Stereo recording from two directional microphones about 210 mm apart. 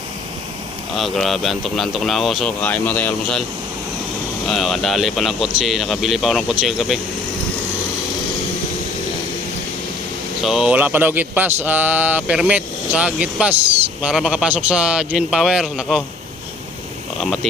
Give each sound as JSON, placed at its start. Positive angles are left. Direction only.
{"t": 0.9, "sound": "speech", "side_deg": 0}
{"t": 4.4, "sound": "speech", "side_deg": 0}
{"t": 10.4, "sound": "speech", "side_deg": 0}
{"t": 17.2, "sound": "a sound", "side_deg": 0}